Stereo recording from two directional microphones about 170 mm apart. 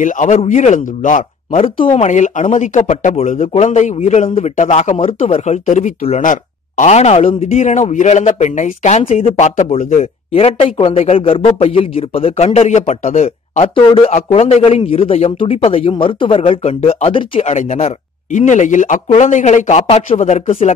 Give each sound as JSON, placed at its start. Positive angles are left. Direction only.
{"t": 0.0, "sound": "a man's voice", "side_deg": 45}
{"t": 1.6, "sound": "a man's voice", "side_deg": 35}
{"t": 2.0, "sound": "a man's voice", "side_deg": 45}